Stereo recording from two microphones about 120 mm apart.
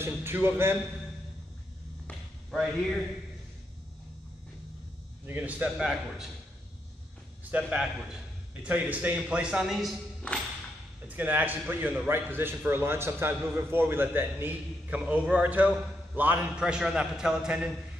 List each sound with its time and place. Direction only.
0.0 s speech: 20° right (ahead or behind)
2.5 s a man's voice: 5° left (ahead or behind)
5.2 s a man's voice: 15° right (ahead or behind)
7.5 s a man's voice: 5° right (ahead or behind)
11.1 s a man's voice: 15° right (ahead or behind)